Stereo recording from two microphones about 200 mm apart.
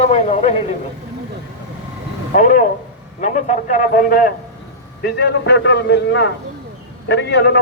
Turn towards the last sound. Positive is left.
turn(degrees=60)  # may be behind; listen again after turning